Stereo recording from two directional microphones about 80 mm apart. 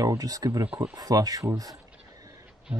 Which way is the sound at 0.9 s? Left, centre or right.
Right.